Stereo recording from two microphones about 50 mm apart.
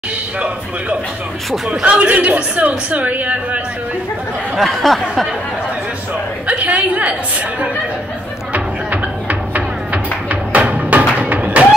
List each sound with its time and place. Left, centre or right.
1.7 s a man's voice: right
4.6 s speech: centre
6.4 s a woman's voice: right
8.5 s music: right
10.5 s a sound: right